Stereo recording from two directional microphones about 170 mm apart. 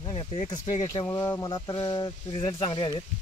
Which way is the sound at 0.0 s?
30° left (ahead or behind).